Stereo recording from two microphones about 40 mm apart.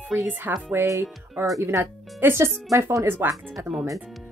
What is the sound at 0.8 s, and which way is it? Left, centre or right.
Speech, right.